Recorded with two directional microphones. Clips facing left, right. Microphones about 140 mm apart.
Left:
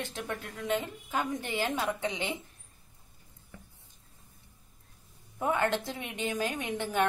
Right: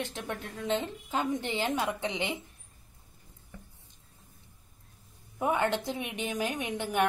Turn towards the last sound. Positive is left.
turn(degrees=-15)  # may be behind; listen again after turning